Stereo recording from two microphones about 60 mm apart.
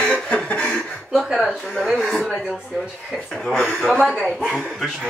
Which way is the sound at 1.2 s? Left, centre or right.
Centre.